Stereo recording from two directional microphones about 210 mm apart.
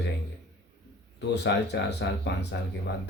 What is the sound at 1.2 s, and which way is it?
Speech, 55° left (ahead or behind).